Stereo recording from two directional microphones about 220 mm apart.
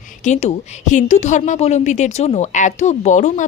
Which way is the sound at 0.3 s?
30° left (ahead or behind).